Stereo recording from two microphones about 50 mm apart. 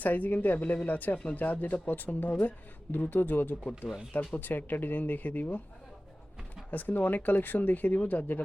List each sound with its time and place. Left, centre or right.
0.0 s speech: left
6.7 s speech: left